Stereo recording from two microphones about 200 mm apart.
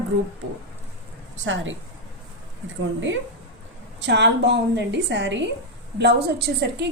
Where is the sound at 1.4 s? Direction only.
70° right (ahead or behind).